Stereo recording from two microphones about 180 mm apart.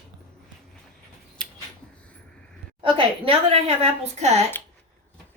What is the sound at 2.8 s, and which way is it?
A woman's voice, 30° right (ahead or behind).